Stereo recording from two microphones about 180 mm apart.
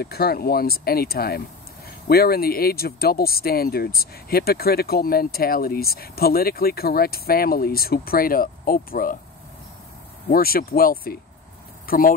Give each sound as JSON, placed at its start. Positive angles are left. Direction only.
{"t": 0.0, "sound": "speech", "side_deg": 60}
{"t": 10.3, "sound": "speech", "side_deg": 55}